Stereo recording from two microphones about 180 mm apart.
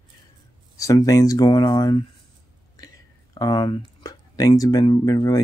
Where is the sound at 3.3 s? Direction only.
25° left (ahead or behind).